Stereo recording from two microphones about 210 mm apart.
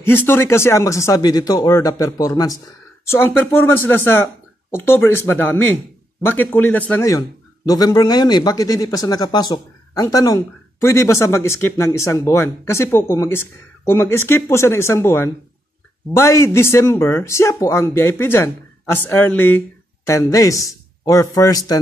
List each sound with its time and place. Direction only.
0.0 s speech: 10° left (ahead or behind)